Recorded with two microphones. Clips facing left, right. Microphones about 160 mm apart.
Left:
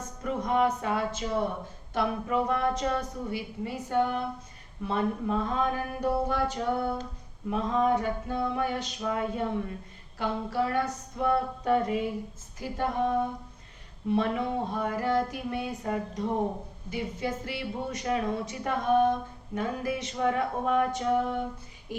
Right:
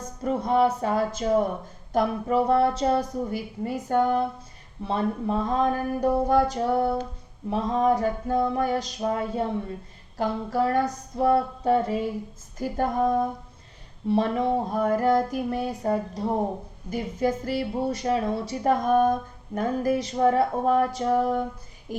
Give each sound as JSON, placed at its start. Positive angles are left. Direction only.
{"t": 0.2, "sound": "speech", "side_deg": -35}
{"t": 12.5, "sound": "speech", "side_deg": -40}